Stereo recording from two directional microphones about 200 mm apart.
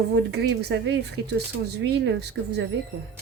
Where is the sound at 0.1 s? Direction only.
55° right (ahead or behind).